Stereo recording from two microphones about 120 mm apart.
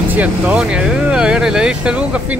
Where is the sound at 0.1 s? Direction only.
10° right (ahead or behind).